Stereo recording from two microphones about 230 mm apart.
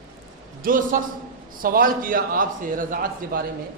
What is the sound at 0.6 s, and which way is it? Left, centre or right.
A man's voice, right.